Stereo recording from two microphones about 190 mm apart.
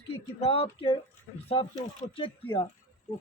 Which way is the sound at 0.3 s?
30° left (ahead or behind).